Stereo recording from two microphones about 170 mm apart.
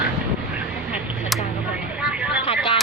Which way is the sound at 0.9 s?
Centre (ahead or behind).